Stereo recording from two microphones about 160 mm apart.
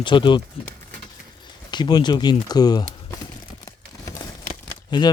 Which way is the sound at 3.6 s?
20° left (ahead or behind).